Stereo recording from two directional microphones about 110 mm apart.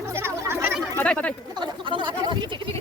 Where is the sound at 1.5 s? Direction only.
50° right (ahead or behind).